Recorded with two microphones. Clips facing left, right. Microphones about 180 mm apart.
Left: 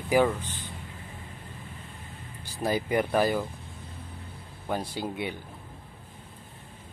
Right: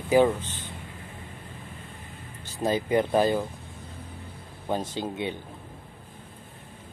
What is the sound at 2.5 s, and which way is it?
Speech, 20° right (ahead or behind).